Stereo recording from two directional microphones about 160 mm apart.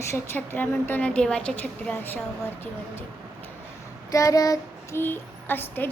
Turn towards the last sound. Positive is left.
turn(degrees=10)  # may be behind; listen again after turning